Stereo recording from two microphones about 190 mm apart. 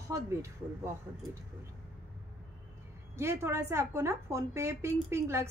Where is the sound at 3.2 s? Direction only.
15° right (ahead or behind).